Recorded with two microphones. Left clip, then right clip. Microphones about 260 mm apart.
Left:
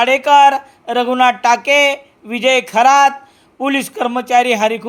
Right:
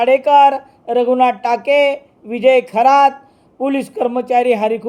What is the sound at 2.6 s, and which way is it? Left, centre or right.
Speech, left.